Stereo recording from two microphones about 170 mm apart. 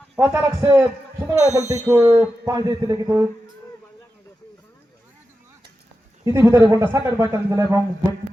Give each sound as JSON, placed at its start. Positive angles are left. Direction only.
{"t": 0.2, "sound": "a man's voice", "side_deg": -15}
{"t": 6.2, "sound": "speech", "side_deg": -15}